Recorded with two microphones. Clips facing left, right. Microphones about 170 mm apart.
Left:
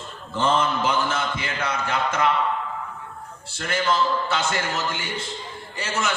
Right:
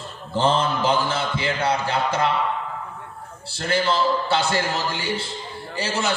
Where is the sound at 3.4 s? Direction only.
35° right (ahead or behind).